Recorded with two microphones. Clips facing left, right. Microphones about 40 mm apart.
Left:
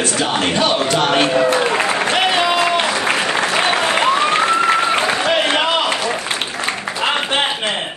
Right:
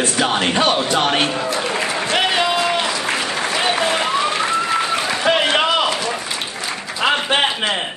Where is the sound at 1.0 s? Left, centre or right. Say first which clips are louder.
Left 4 dB; left.